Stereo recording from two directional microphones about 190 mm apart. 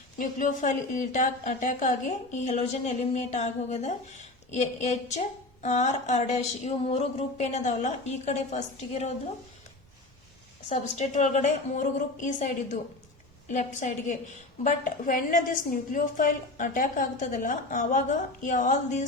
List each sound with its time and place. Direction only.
0.2 s speech: 45° left (ahead or behind)
10.7 s a woman's voice: 35° left (ahead or behind)